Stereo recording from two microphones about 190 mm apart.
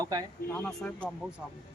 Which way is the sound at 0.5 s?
5° left (ahead or behind).